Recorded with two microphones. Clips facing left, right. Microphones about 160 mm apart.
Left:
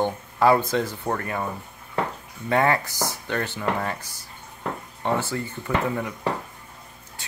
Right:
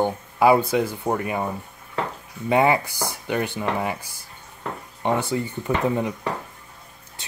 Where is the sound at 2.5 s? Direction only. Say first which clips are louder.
Right 3 dB; 15° right (ahead or behind).